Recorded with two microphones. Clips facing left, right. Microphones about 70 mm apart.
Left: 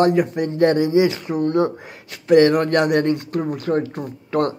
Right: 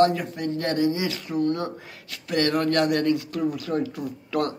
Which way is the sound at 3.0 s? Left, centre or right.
Left.